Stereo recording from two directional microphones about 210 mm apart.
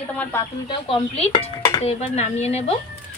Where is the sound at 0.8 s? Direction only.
25° left (ahead or behind).